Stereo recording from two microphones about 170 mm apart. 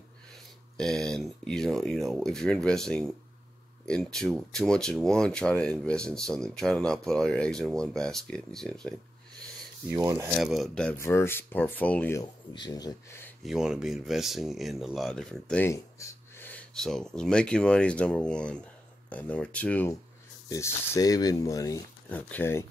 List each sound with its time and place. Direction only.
0.7 s speech: 5° left (ahead or behind)
9.8 s speech: 20° right (ahead or behind)
10.3 s speech: centre (ahead or behind)
11.0 s speech: 15° left (ahead or behind)
12.2 s speech: 25° left (ahead or behind)
13.4 s speech: centre (ahead or behind); by 22.7 s 15° left (ahead or behind)